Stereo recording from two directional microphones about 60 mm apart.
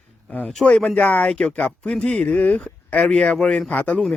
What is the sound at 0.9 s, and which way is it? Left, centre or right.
Speech, left.